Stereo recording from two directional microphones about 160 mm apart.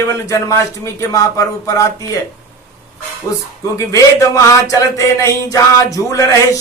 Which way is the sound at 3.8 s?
20° left (ahead or behind).